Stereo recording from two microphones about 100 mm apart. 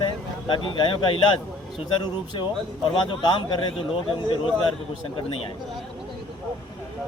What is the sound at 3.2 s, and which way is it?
Speech, 45° left (ahead or behind).